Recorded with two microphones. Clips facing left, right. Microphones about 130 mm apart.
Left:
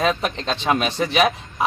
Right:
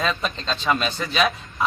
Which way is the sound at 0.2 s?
65° left (ahead or behind).